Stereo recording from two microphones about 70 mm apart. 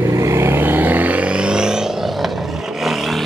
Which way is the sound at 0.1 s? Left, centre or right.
Right.